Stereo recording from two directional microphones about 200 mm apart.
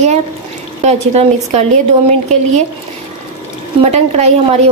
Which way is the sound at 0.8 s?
35° right (ahead or behind).